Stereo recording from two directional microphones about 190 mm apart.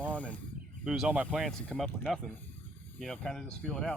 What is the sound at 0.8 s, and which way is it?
Speech, 5° right (ahead or behind).